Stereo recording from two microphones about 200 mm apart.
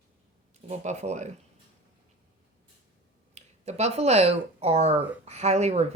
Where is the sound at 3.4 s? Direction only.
35° right (ahead or behind).